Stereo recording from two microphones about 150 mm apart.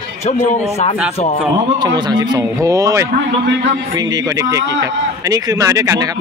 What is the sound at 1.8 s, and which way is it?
A man's voice, 30° right (ahead or behind).